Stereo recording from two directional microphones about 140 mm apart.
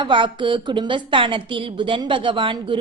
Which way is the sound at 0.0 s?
35° right (ahead or behind).